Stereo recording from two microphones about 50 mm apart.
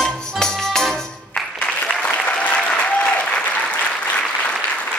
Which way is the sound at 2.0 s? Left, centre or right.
Left.